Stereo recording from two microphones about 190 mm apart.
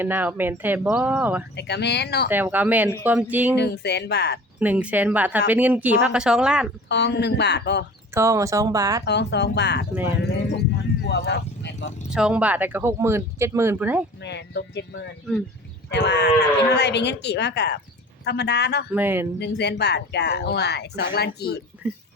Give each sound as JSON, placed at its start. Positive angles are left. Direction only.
{"t": 0.0, "sound": "speech", "side_deg": -10}
{"t": 1.5, "sound": "speech", "side_deg": 60}
{"t": 2.3, "sound": "speech", "side_deg": -10}
{"t": 3.6, "sound": "speech", "side_deg": 60}
{"t": 4.6, "sound": "speech", "side_deg": -10}
{"t": 6.8, "sound": "speech", "side_deg": 65}
{"t": 8.1, "sound": "speech", "side_deg": -15}
{"t": 9.0, "sound": "speech", "side_deg": 65}
{"t": 11.0, "sound": "a sound", "side_deg": 60}
{"t": 12.1, "sound": "speech", "side_deg": -5}
{"t": 14.2, "sound": "speech", "side_deg": 65}
{"t": 18.9, "sound": "speech", "side_deg": -10}
{"t": 19.4, "sound": "speech", "side_deg": 60}